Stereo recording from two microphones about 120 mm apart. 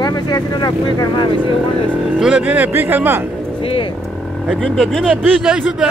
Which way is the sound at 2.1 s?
5° right (ahead or behind).